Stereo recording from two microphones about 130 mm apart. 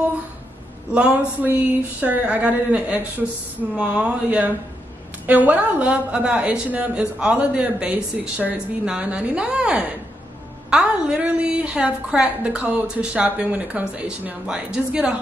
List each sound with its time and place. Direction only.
0.9 s speech: 10° right (ahead or behind)